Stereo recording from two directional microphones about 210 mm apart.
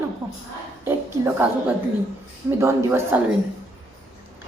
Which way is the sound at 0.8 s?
10° right (ahead or behind).